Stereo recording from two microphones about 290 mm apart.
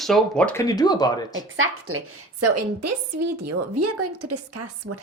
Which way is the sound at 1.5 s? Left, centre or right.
Right.